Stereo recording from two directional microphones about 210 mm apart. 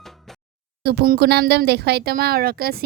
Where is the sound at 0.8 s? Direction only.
45° right (ahead or behind).